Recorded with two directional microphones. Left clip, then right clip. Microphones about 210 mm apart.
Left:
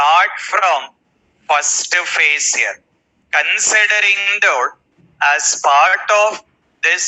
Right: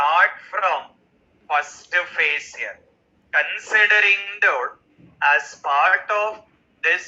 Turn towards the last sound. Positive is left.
turn(degrees=45)  # may be behind; listen again after turning